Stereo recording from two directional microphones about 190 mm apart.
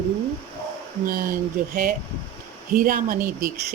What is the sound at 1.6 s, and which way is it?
A woman's voice, 50° right (ahead or behind).